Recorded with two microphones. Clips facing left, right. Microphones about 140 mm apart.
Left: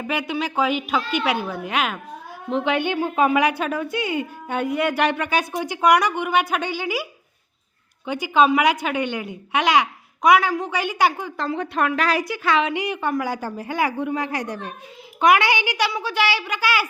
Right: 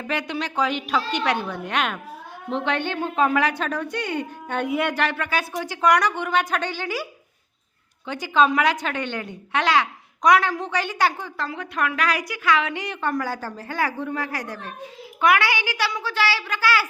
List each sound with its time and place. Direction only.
0.1 s a woman's voice: 10° left (ahead or behind)
4.9 s a woman's voice: 15° left (ahead or behind)
11.4 s a woman's voice: 30° left (ahead or behind)